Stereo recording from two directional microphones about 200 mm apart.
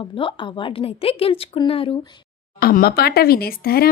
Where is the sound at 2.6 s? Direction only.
50° left (ahead or behind).